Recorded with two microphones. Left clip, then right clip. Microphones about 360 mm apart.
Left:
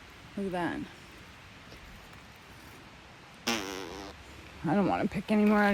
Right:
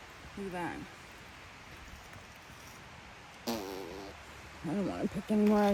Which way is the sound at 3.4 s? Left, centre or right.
Left.